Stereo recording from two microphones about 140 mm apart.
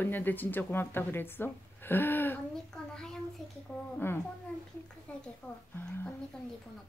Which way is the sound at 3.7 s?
15° left (ahead or behind).